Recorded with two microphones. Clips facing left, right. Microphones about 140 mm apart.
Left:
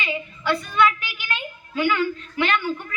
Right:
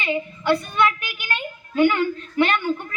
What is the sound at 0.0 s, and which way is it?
A woman's voice, 45° right (ahead or behind).